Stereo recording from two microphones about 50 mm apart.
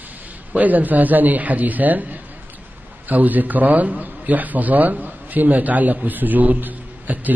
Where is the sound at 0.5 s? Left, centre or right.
Right.